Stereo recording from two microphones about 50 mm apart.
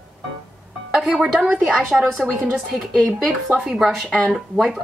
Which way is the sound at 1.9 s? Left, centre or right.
Centre.